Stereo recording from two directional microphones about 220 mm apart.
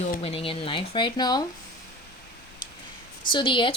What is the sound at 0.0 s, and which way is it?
Speech, 30° left (ahead or behind).